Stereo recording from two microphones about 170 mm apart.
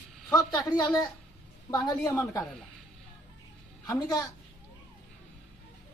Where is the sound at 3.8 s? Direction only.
20° left (ahead or behind).